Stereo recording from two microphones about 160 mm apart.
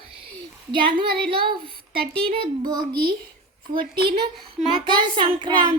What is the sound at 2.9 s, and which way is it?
Speech, 75° right (ahead or behind).